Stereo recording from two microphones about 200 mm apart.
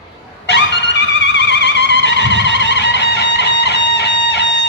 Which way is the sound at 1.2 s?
60° left (ahead or behind).